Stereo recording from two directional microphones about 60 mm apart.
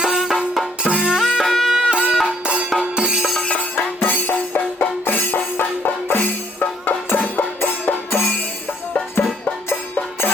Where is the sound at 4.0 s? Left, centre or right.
Left.